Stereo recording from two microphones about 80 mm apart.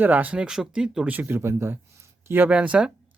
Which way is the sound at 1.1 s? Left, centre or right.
Right.